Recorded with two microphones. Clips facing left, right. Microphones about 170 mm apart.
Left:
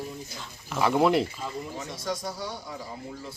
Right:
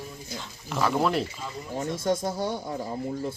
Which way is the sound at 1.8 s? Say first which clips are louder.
Right 10 dB; 50° right (ahead or behind).